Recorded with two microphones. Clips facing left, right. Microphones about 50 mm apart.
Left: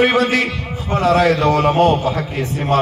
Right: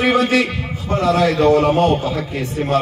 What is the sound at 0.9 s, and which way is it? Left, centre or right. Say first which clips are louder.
Speech: left 1 dB; left.